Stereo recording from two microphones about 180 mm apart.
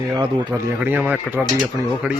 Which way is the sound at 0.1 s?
20° right (ahead or behind).